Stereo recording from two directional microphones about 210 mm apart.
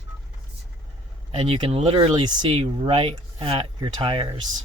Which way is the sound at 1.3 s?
25° right (ahead or behind).